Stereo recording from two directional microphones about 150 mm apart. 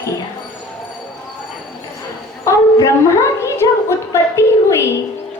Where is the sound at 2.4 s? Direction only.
20° left (ahead or behind).